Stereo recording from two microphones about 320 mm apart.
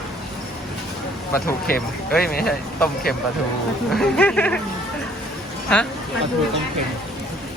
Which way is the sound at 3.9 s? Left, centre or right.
Centre.